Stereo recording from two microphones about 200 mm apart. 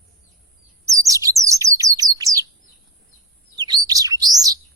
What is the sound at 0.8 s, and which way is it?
Chirp, 15° right (ahead or behind).